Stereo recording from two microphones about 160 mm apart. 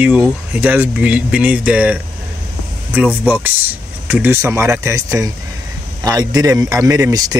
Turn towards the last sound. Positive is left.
turn(degrees=-20)  # may be behind; listen again after turning